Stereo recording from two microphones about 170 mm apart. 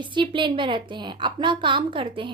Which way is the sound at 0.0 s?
30° right (ahead or behind).